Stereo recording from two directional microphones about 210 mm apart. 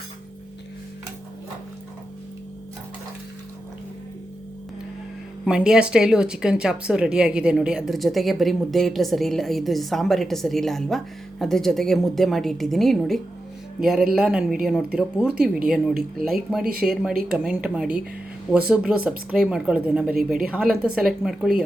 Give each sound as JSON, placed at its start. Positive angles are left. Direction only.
{"t": 5.5, "sound": "speech", "side_deg": -5}